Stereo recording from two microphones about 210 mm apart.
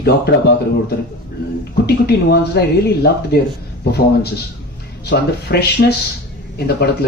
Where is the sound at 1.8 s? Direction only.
50° left (ahead or behind).